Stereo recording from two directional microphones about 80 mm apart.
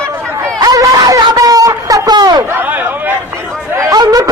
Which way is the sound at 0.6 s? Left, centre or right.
Right.